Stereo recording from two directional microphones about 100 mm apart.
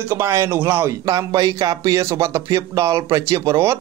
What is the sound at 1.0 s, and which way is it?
Speech, 35° right (ahead or behind).